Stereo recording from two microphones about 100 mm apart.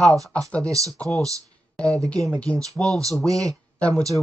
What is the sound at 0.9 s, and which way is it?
Speech, 5° left (ahead or behind).